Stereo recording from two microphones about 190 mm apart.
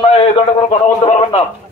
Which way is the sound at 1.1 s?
30° left (ahead or behind).